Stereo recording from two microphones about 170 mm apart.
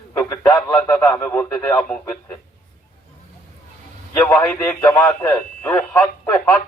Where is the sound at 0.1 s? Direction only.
10° left (ahead or behind).